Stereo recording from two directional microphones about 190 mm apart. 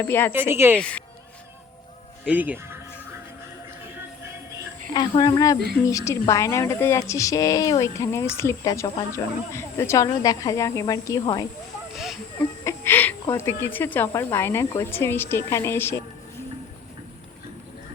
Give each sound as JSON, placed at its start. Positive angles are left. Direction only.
{"t": 0.0, "sound": "a woman's voice", "side_deg": 10}
{"t": 0.3, "sound": "speech", "side_deg": -10}
{"t": 0.8, "sound": "a woman's voice", "side_deg": 5}
{"t": 2.2, "sound": "speech", "side_deg": -10}
{"t": 4.9, "sound": "a woman's voice", "side_deg": 20}
{"t": 11.9, "sound": "speech", "side_deg": 0}
{"t": 12.6, "sound": "a sound", "side_deg": 10}
{"t": 13.7, "sound": "a woman's voice", "side_deg": 10}